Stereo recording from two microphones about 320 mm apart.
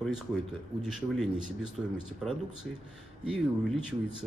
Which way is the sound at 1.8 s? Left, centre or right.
Centre.